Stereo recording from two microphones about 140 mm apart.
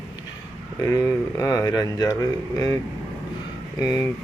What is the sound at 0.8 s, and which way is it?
Speech, 20° left (ahead or behind).